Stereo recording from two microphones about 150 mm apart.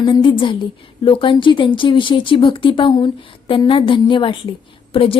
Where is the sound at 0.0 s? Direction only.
35° left (ahead or behind).